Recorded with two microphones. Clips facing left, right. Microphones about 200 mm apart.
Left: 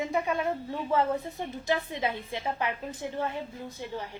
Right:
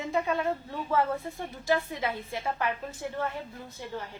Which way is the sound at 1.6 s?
20° left (ahead or behind).